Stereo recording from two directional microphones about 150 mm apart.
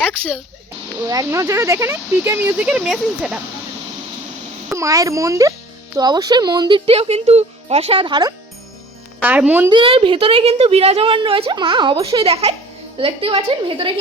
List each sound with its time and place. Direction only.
1.0 s speech: 20° right (ahead or behind); by 3.3 s 5° right (ahead or behind)
4.7 s a child's voice: 20° right (ahead or behind)
9.2 s speech: 10° right (ahead or behind)
9.6 s a woman's voice: 35° right (ahead or behind)